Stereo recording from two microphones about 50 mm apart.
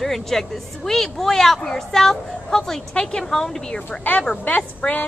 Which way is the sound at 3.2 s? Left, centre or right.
Centre.